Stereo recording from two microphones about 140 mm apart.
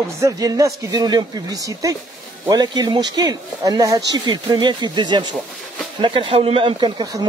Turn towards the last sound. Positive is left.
turn(degrees=-30)  # may be behind; listen again after turning